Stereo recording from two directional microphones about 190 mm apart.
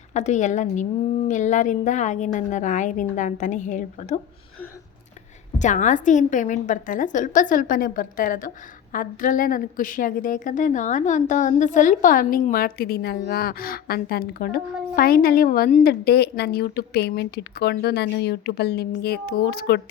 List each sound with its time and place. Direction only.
0.1 s a woman's voice: 35° left (ahead or behind)
5.5 s a woman's voice: 40° left (ahead or behind); by 19.8 s 55° left (ahead or behind)